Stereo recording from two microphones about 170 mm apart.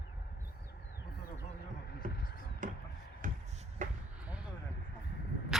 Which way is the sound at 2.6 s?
50° right (ahead or behind).